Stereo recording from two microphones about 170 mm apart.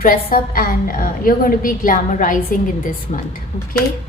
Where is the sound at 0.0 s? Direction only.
55° left (ahead or behind).